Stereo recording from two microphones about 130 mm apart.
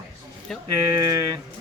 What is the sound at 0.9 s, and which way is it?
Speech, 25° right (ahead or behind).